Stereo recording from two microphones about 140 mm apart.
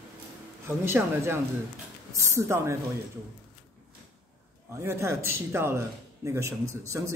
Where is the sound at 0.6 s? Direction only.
15° right (ahead or behind).